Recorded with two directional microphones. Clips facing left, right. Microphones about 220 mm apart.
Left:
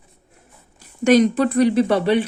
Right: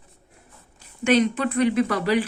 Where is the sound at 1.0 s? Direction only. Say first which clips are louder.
Left 5 dB; 40° left (ahead or behind).